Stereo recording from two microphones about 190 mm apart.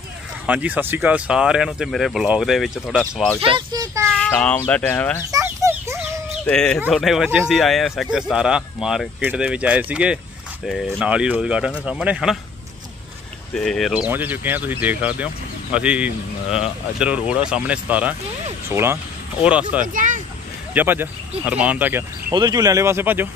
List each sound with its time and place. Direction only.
0.5 s speech: 10° right (ahead or behind)
3.3 s speech: 25° right (ahead or behind)
4.1 s speech: 5° left (ahead or behind)
5.3 s chicken: 15° right (ahead or behind)
6.4 s speech: 5° left (ahead or behind)
13.6 s speech: centre (ahead or behind)
19.9 s speech: 45° right (ahead or behind)
20.7 s speech: 10° right (ahead or behind)
22.3 s speech: 20° right (ahead or behind)